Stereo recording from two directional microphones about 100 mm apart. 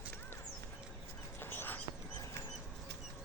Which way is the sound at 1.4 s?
20° left (ahead or behind).